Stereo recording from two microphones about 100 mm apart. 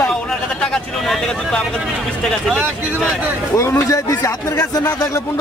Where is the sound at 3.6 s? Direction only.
30° left (ahead or behind).